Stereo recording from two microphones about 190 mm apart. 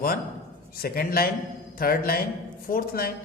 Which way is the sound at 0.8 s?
50° left (ahead or behind).